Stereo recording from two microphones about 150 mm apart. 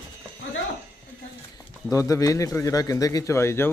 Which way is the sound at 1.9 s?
20° left (ahead or behind).